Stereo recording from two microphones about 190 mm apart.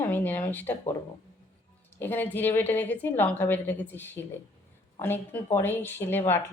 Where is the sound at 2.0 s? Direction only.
10° left (ahead or behind).